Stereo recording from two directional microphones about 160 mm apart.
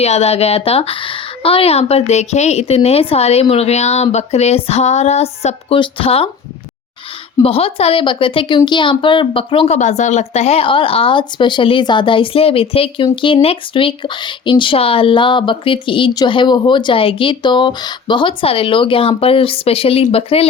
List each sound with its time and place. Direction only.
0.0 s a woman's voice: 40° left (ahead or behind)
7.4 s a woman's voice: 35° left (ahead or behind)